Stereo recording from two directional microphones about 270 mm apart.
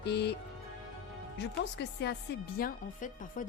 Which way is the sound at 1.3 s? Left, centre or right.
Left.